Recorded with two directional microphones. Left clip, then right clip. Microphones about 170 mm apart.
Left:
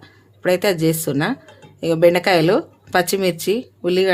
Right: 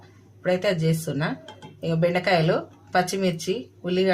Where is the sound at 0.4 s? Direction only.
90° left.